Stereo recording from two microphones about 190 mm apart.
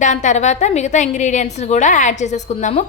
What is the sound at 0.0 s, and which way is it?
A woman's voice, 40° left (ahead or behind).